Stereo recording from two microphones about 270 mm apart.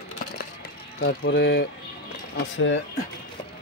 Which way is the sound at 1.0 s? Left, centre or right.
Left.